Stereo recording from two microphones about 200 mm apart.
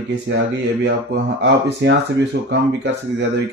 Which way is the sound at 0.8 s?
60° right (ahead or behind).